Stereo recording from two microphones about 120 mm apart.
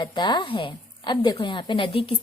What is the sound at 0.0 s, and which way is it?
A woman's voice, 40° left (ahead or behind).